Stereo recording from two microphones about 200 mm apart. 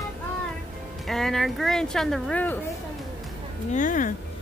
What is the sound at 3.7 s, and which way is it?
Speech, 40° left (ahead or behind).